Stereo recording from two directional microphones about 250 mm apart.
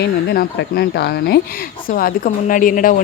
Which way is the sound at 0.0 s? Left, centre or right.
Left.